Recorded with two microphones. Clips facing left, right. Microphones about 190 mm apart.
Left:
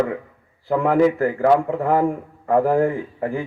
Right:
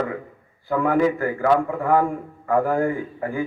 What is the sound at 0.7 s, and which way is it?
Speech, 30° left (ahead or behind).